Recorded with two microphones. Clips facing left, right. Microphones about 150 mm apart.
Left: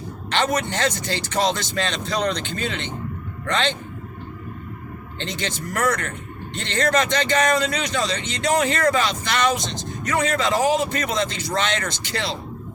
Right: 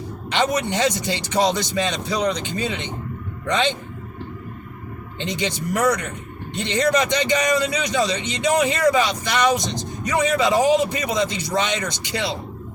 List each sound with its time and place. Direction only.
0.3 s speech: 15° right (ahead or behind)
5.2 s speech: 15° right (ahead or behind)